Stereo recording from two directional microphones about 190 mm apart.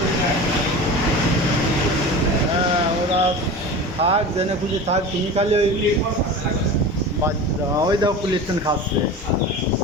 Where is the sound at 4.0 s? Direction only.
30° right (ahead or behind).